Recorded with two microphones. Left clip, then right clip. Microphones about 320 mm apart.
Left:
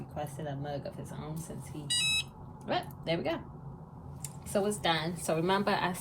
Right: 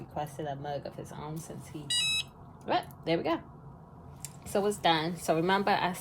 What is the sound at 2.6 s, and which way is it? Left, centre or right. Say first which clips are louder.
Speech: right 3 dB; right.